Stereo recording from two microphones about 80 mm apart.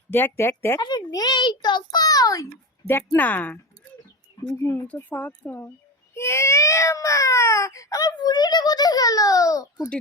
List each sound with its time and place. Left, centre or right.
0.1 s speech: left
0.8 s a child's voice: left
3.2 s speech: left
4.5 s speech: left
4.9 s speech: centre; by 9.9 s left